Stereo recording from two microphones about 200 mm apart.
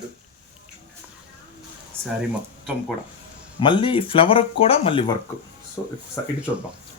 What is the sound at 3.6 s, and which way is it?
Speech, 25° left (ahead or behind).